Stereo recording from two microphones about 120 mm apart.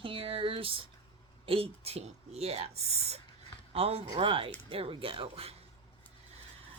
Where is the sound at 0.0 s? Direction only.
45° right (ahead or behind).